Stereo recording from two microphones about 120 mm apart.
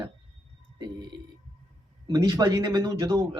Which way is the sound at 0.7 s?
35° right (ahead or behind).